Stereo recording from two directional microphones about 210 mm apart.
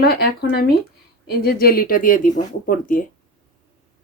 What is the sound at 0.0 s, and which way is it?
Speech, 45° left (ahead or behind).